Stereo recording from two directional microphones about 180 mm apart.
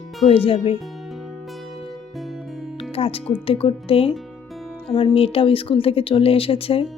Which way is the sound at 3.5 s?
30° left (ahead or behind).